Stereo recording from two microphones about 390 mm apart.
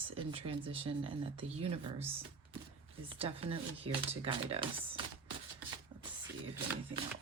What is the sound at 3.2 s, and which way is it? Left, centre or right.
Speech, centre.